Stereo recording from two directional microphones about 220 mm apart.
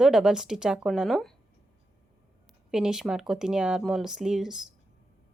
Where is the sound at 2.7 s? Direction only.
Centre (ahead or behind).